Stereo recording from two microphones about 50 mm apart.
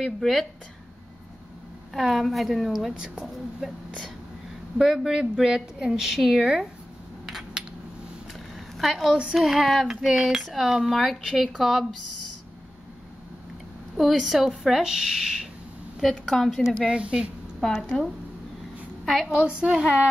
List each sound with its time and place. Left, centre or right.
0.0 s speech: centre
2.0 s a woman's voice: centre
8.5 s a sound: centre
9.3 s speech: centre
9.8 s a woman's voice: centre
10.2 s speech: centre
13.9 s a woman's voice: centre
16.0 s speech: centre
16.8 s speech: centre
19.2 s a woman's voice: centre